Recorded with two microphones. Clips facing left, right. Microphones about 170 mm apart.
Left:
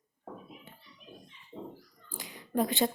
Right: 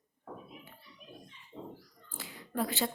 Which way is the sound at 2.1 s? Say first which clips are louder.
Left 5 dB; 20° left (ahead or behind).